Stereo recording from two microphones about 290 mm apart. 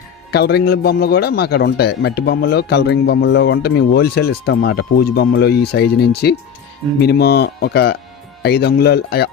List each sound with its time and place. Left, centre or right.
0.3 s speech: left